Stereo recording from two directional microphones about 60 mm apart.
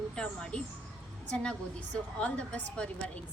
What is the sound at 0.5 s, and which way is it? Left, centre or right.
A woman's voice, centre.